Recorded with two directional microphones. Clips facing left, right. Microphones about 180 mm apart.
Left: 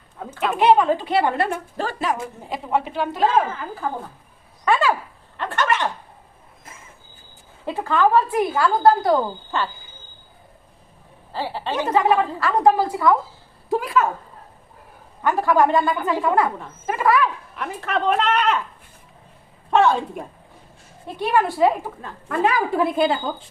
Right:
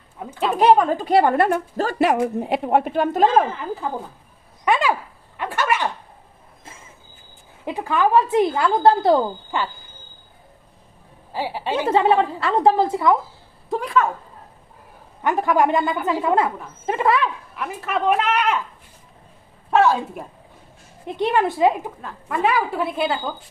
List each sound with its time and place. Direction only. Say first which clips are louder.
0.3 s speech: right 1 dB; 35° right (ahead or behind); by 1.6 s 55° right (ahead or behind)
1.7 s speech: right 4 dB; 45° right (ahead or behind)
2.0 s speech: right 7 dB; 70° right (ahead or behind); by 3.4 s 45° right (ahead or behind)
4.6 s a sound: even; 15° right (ahead or behind)
7.6 s a woman's voice: left 1 dB; 15° right (ahead or behind)
9.5 s speech: even; 15° right (ahead or behind)
11.3 s speech: right 2 dB; 15° right (ahead or behind)
11.9 s a woman's voice: right 1 dB; 30° right (ahead or behind)
13.7 s a woman's voice: even; 5° left (ahead or behind)
15.2 s a woman's voice: left 1 dB; 20° right (ahead or behind)
17.5 s speech: even; 5° right (ahead or behind)
19.7 s a woman's voice: even; 5° right (ahead or behind)
21.2 s a woman's voice: even; 20° right (ahead or behind)
22.0 s a woman's voice: even; centre (ahead or behind)